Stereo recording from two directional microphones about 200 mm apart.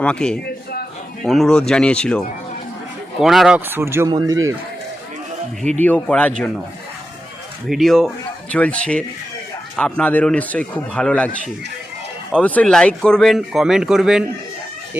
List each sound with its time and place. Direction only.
0.0 s speech: 5° left (ahead or behind); by 4.5 s 15° right (ahead or behind)
5.8 s speech: 10° left (ahead or behind)
7.7 s speech: centre (ahead or behind)
12.3 s speech: 5° left (ahead or behind)